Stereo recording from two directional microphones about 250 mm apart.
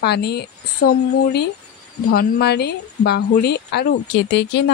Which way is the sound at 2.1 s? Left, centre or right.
Left.